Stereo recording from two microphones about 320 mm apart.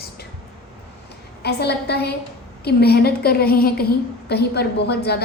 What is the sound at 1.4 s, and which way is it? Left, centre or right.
A woman's voice, left.